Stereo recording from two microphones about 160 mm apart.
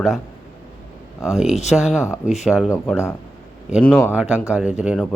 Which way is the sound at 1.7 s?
5° right (ahead or behind).